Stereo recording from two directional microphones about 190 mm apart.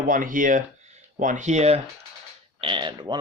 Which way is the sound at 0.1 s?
45° right (ahead or behind).